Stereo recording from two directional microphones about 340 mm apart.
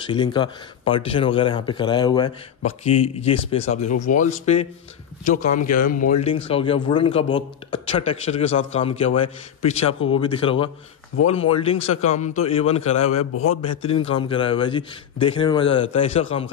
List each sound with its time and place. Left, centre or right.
0.1 s speech: centre
9.8 s a man's voice: left
10.2 s speech: centre
13.1 s a man's voice: left
13.6 s speech: centre